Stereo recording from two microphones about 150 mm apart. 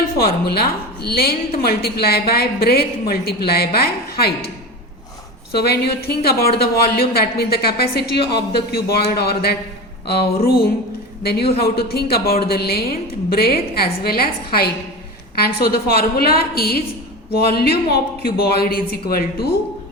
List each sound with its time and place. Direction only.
0.2 s a woman's voice: 90° left
5.5 s a woman's voice: 90° left